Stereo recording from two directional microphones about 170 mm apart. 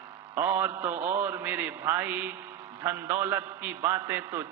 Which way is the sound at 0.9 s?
45° right (ahead or behind).